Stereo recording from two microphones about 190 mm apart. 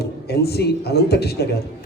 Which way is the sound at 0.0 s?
55° left (ahead or behind).